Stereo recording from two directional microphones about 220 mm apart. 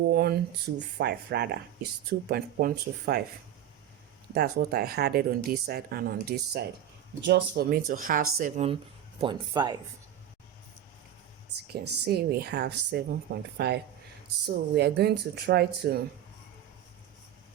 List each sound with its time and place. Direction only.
0.1 s speech: 45° right (ahead or behind)
4.4 s speech: 45° right (ahead or behind); by 9.7 s 20° right (ahead or behind)
11.7 s speech: 45° right (ahead or behind)